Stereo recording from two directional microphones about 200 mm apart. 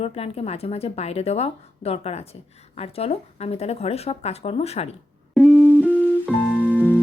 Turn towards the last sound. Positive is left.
turn(degrees=-10)  # may be behind; listen again after turning